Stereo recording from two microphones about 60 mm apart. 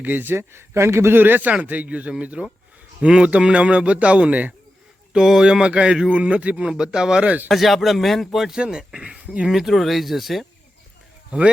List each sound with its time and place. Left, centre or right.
0.0 s a man's voice: right
5.1 s speech: centre
7.5 s speech: centre
9.5 s speech: centre